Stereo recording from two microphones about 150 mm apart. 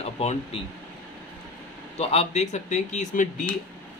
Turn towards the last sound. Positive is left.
turn(degrees=55)  # may be behind; listen again after turning